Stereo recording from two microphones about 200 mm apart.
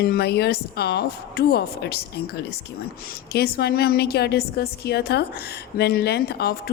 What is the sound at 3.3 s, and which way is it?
A woman's voice, 50° left (ahead or behind).